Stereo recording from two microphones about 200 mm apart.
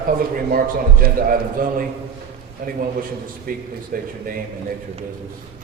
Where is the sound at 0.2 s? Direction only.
45° right (ahead or behind).